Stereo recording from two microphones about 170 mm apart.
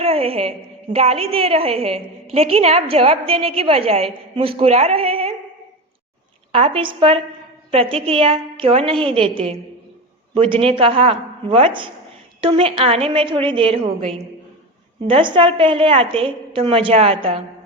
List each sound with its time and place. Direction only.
0.0 s a woman's voice: 35° right (ahead or behind)
6.5 s a woman's voice: 35° right (ahead or behind)